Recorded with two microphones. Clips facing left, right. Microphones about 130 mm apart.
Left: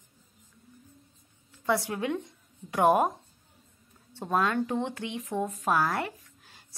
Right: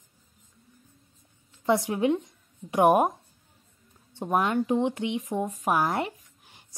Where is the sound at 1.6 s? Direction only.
20° right (ahead or behind).